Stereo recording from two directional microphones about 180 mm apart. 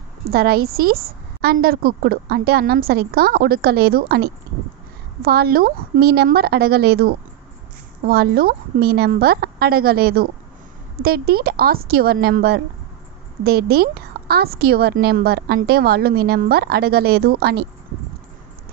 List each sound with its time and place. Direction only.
0.3 s a woman's voice: 60° right (ahead or behind)